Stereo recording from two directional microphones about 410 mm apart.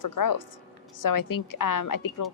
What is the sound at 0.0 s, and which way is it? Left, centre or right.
A woman's voice, left.